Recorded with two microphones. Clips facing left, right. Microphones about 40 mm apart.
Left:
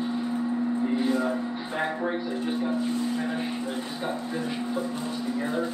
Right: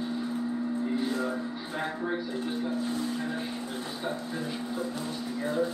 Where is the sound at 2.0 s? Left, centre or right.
Left.